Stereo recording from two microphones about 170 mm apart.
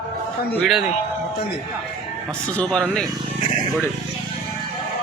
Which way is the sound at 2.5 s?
5° left (ahead or behind).